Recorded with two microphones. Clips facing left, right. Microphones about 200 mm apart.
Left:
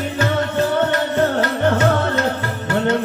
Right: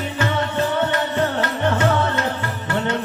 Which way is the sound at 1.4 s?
45° left (ahead or behind).